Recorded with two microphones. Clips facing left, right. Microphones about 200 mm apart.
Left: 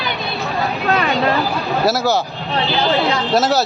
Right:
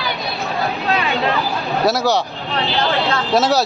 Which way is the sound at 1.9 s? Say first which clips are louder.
Right 1 dB; centre (ahead or behind).